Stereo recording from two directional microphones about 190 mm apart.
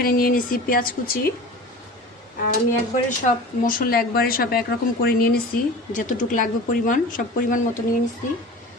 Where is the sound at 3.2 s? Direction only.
45° left (ahead or behind).